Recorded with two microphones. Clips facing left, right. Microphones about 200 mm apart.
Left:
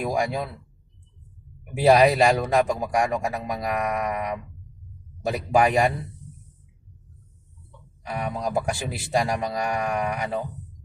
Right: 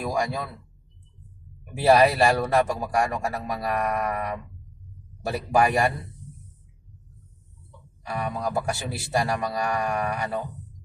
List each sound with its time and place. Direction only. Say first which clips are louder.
0.0 s a man's voice: left 2 dB; 20° left (ahead or behind)
2.0 s a man's voice: left 1 dB; 20° left (ahead or behind)
8.0 s a man's voice: even; 20° left (ahead or behind)